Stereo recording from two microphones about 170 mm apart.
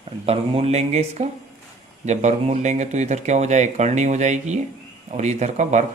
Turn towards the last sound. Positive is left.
turn(degrees=-45)  # may be behind; listen again after turning